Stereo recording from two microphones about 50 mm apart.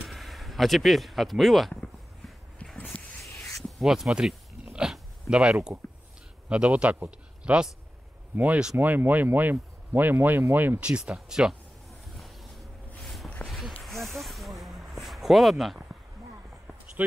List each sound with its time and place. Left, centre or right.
0.0 s speech: centre
2.6 s a sound: left
3.8 s speech: centre
5.3 s speech: centre
8.7 s speech: right
10.8 s speech: right
11.1 s speech: centre
13.0 s a sound: centre